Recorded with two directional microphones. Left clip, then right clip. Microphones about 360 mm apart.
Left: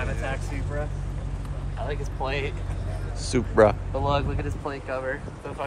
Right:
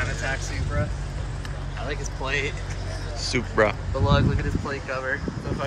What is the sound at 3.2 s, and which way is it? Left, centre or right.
Speech, centre.